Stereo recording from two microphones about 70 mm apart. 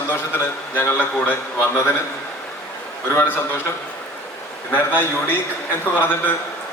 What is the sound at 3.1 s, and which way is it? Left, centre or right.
Speech, left.